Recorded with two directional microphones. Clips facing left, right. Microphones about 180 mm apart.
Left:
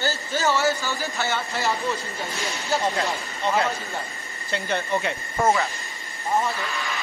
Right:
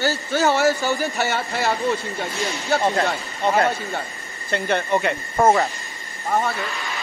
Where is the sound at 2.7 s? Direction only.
55° right (ahead or behind).